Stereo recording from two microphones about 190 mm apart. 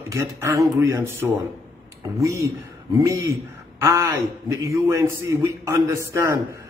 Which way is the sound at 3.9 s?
15° right (ahead or behind).